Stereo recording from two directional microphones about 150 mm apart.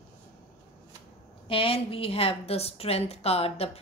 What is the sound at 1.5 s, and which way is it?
A woman's voice, 40° left (ahead or behind).